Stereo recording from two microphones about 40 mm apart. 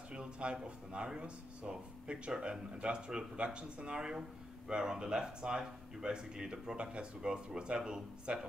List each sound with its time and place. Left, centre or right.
0.1 s speech: right